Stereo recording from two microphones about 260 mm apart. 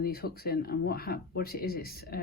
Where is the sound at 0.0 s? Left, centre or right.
Left.